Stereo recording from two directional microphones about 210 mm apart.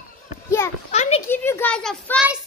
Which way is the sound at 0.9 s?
30° left (ahead or behind).